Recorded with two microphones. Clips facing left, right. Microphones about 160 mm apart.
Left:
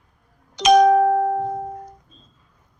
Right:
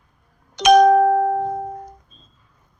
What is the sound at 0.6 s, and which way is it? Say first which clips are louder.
Music: right 1 dB; 60° right (ahead or behind).